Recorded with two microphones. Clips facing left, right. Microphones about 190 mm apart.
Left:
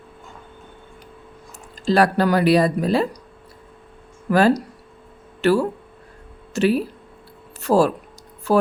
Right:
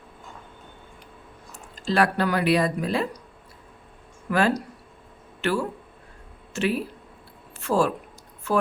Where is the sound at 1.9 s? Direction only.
40° left (ahead or behind).